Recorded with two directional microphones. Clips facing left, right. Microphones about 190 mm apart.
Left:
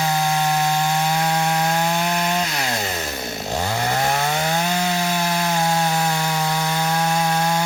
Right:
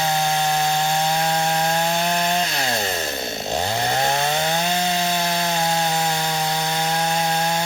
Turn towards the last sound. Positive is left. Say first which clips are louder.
# left 2 dB
turn(degrees=-25)  # may be behind; listen again after turning